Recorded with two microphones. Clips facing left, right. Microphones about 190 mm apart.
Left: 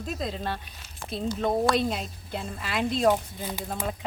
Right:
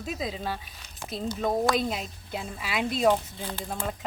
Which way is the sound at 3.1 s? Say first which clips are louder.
Even; 10° left (ahead or behind).